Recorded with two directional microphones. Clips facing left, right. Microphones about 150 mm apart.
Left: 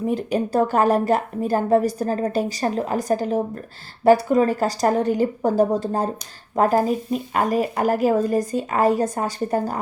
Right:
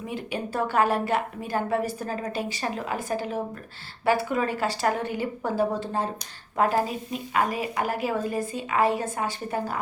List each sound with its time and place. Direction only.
0.0 s a woman's voice: 40° left (ahead or behind)